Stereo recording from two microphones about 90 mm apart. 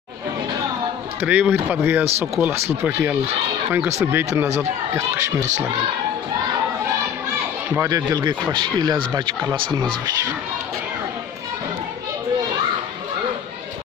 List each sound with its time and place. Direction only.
1.2 s speech: 15° right (ahead or behind)
7.8 s speech: 40° right (ahead or behind)